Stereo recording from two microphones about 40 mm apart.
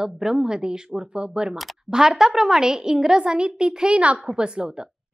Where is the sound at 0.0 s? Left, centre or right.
Centre.